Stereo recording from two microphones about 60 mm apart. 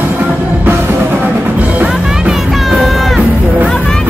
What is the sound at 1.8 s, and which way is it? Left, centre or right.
Music, centre.